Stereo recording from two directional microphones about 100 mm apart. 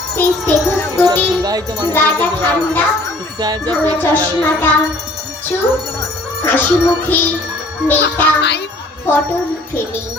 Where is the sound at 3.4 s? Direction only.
40° right (ahead or behind).